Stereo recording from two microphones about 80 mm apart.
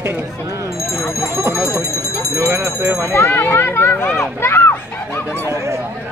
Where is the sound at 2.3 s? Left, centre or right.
Right.